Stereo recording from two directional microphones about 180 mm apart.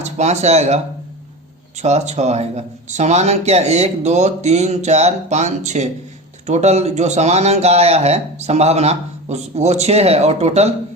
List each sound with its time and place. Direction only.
0.0 s speech: 40° right (ahead or behind)
1.8 s speech: 40° right (ahead or behind)